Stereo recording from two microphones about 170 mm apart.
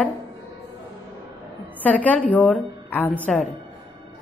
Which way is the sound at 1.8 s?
10° left (ahead or behind).